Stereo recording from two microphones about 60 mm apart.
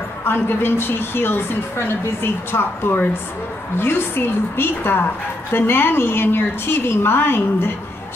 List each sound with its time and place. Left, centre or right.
0.2 s a woman's voice: left